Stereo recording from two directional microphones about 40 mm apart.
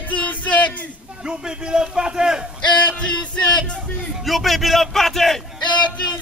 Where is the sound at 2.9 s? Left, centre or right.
Left.